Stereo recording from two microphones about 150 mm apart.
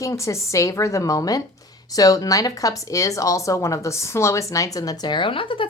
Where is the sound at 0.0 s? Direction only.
20° left (ahead or behind).